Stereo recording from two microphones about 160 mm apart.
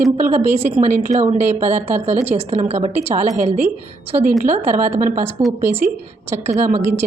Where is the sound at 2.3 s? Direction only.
40° right (ahead or behind).